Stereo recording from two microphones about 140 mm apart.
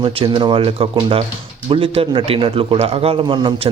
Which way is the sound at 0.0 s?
40° right (ahead or behind).